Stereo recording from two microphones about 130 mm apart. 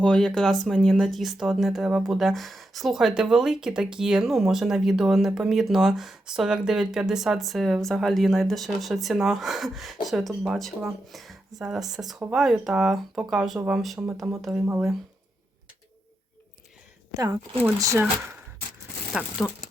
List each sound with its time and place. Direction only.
0.0 s speech: 5° left (ahead or behind)
14.6 s speech: 15° right (ahead or behind)
17.2 s speech: 30° right (ahead or behind)
19.1 s speech: centre (ahead or behind)